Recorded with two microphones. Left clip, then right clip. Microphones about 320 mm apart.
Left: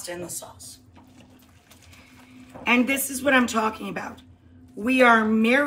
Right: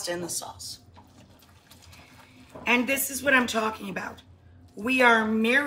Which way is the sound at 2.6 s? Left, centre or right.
Centre.